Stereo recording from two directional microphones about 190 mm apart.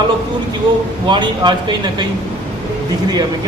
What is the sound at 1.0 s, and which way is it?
A man's voice, 25° right (ahead or behind).